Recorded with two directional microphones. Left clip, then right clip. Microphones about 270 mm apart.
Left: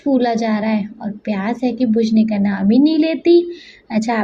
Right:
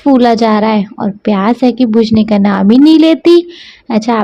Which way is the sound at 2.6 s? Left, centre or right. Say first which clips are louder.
Right 7 dB; right.